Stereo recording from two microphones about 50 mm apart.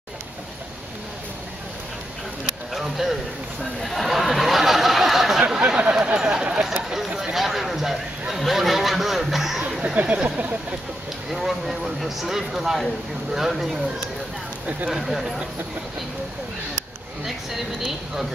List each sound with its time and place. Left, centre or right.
2.7 s a sound: centre
5.8 s speech: right; by 9.6 s centre
9.7 s a sound: centre
10.0 s speech: right
11.3 s speech: centre
17.2 s speech: centre